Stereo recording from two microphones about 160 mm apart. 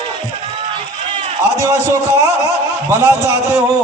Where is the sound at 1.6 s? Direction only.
20° right (ahead or behind).